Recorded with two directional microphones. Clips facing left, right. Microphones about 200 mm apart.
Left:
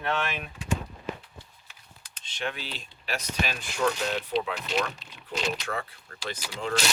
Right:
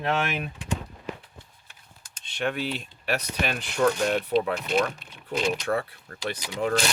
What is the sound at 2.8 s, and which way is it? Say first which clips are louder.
Speech: right 6 dB; 60° right (ahead or behind).